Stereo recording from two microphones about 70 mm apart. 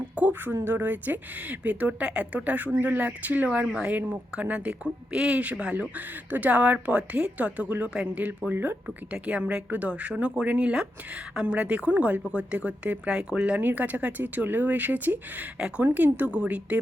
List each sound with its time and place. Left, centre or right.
0.2 s speech: right
3.7 s speech: centre